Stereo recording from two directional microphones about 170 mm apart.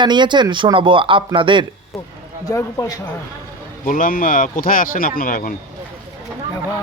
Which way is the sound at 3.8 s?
55° left (ahead or behind).